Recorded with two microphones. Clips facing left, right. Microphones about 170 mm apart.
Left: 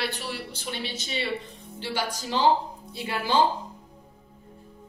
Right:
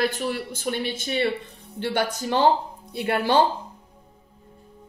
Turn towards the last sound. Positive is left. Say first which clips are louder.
# right 4 dB
turn(degrees=-60)  # may be behind; listen again after turning